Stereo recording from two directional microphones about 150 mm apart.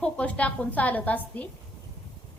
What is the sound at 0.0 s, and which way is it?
A woman's voice, 10° left (ahead or behind).